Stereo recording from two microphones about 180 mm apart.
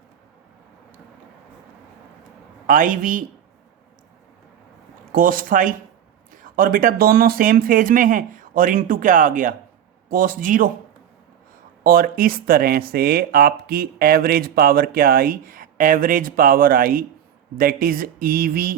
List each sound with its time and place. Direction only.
2.6 s speech: 50° right (ahead or behind)
5.1 s speech: 50° right (ahead or behind)
11.8 s speech: 55° right (ahead or behind)